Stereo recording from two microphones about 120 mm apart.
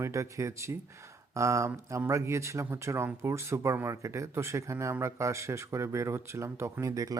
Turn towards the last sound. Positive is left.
turn(degrees=-30)  # may be behind; listen again after turning